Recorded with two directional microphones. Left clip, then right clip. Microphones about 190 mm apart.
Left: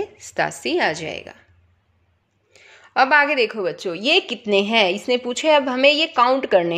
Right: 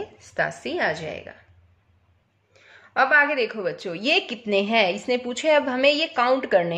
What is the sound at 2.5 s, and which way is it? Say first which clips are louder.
A woman's voice: left 4 dB; 45° left (ahead or behind).